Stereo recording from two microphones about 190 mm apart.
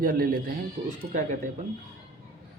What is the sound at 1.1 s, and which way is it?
Speech, 40° right (ahead or behind).